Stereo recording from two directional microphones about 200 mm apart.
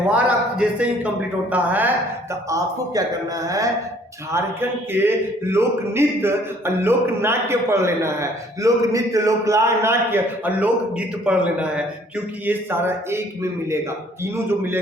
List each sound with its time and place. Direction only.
0.1 s speech: 5° right (ahead or behind)
3.4 s speech: 15° right (ahead or behind)